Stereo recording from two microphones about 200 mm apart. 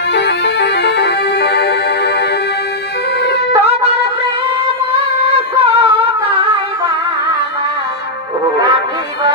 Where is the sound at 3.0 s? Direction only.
55° left (ahead or behind).